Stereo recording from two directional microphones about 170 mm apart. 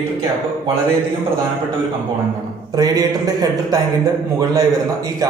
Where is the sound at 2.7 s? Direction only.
20° right (ahead or behind).